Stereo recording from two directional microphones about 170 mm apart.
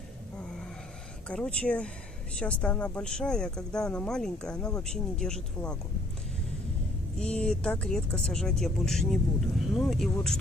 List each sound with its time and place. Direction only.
1.3 s speech: 5° left (ahead or behind)
7.2 s speech: 5° left (ahead or behind)